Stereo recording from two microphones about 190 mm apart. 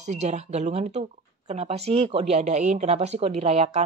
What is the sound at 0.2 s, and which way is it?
A woman's voice, 35° right (ahead or behind).